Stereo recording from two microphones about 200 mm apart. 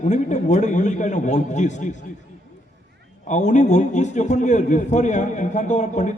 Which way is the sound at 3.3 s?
40° left (ahead or behind).